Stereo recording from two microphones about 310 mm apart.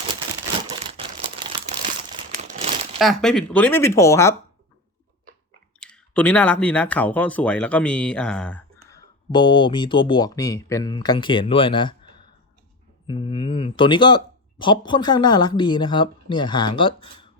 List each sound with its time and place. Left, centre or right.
0.7 s crumpling: centre
3.0 s speech: centre
5.8 s speech: centre
13.1 s speech: centre